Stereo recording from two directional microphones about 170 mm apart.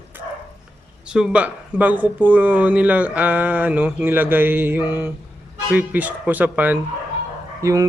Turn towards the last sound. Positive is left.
turn(degrees=-20)  # may be behind; listen again after turning